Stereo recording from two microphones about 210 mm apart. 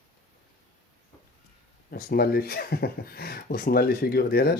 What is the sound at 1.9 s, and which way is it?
Speech, 45° left (ahead or behind).